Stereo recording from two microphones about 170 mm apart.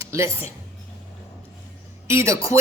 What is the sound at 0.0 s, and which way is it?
Speech, 15° right (ahead or behind).